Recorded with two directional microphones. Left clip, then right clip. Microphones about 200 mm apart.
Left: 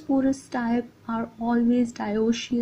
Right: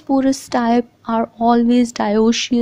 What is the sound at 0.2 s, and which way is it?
Speech, 40° right (ahead or behind).